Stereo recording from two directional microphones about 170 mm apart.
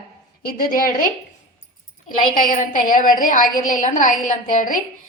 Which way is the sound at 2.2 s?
55° left (ahead or behind).